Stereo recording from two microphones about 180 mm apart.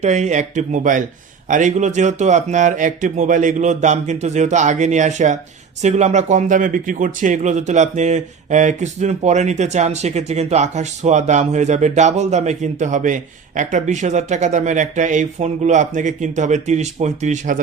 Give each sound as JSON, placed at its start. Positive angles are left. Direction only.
{"t": 0.0, "sound": "speech", "side_deg": -40}